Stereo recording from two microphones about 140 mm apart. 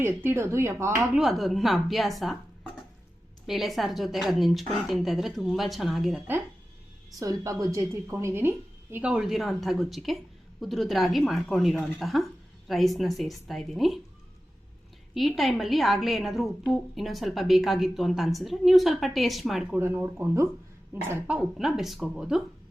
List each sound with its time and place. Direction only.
0.0 s speech: 15° right (ahead or behind)
1.1 s a woman's voice: centre (ahead or behind)
3.4 s a woman's voice: centre (ahead or behind)
7.2 s a woman's voice: 25° right (ahead or behind); by 14.0 s centre (ahead or behind)
15.1 s a woman's voice: centre (ahead or behind)
19.8 s a woman's voice: 15° right (ahead or behind)